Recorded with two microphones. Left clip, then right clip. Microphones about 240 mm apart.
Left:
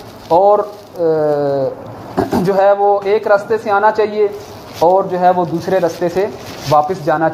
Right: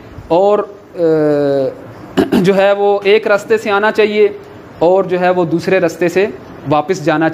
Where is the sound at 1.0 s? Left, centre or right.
Right.